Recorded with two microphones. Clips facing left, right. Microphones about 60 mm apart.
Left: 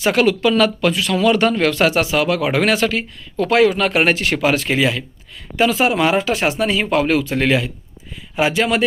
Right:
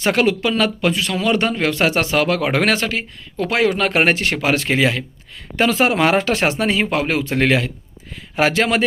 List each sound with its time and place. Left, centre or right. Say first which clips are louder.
0.1 s speech: left 2 dB; right
2.0 s speech: even; right
3.4 s speech: left 3 dB; right